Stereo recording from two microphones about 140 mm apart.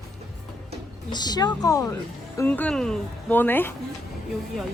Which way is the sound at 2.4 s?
10° left (ahead or behind).